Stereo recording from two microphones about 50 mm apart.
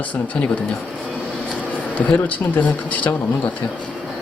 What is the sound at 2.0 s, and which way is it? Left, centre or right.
Speech, left.